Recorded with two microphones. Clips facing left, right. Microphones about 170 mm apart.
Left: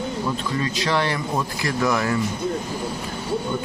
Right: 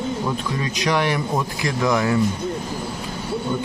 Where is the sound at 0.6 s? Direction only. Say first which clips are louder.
Right 1 dB; 15° right (ahead or behind).